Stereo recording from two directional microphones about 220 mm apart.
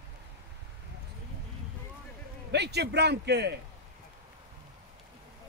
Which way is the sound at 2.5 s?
50° right (ahead or behind).